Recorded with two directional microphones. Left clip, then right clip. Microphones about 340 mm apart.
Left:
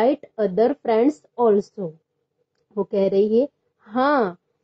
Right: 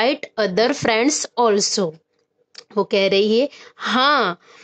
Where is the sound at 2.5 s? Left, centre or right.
Right.